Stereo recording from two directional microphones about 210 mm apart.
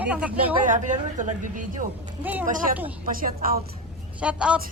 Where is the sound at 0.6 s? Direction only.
35° right (ahead or behind).